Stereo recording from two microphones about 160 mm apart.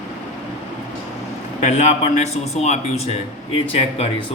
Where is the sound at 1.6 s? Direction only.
45° left (ahead or behind).